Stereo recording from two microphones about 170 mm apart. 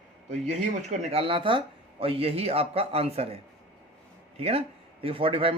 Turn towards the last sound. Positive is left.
turn(degrees=-30)  # may be behind; listen again after turning